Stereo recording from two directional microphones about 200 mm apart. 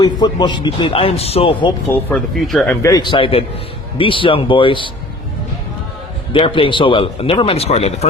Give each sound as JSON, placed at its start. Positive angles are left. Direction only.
{"t": 0.0, "sound": "a man's voice", "side_deg": 20}
{"t": 1.9, "sound": "speech", "side_deg": 5}
{"t": 2.8, "sound": "a man's voice", "side_deg": 20}
{"t": 6.3, "sound": "a man's voice", "side_deg": 25}